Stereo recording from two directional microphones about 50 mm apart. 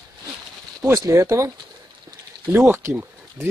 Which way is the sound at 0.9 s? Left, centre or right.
Right.